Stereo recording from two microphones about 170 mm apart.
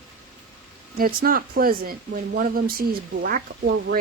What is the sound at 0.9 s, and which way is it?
Speech, 60° right (ahead or behind).